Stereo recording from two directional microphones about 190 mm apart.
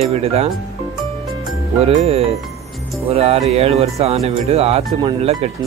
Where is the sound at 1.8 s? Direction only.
30° right (ahead or behind).